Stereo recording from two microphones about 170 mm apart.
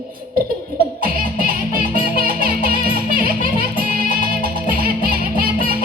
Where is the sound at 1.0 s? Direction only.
55° right (ahead or behind).